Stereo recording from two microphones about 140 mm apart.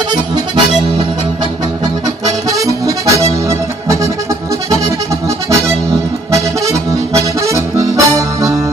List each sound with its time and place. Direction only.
2.5 s accordion: 25° right (ahead or behind)
7.1 s accordion: 20° right (ahead or behind)